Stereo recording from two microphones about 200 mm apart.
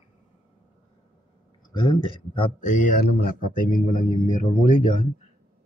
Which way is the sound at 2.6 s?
45° left (ahead or behind).